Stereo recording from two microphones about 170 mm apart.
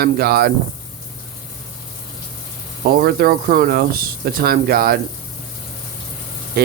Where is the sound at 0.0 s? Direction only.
65° right (ahead or behind).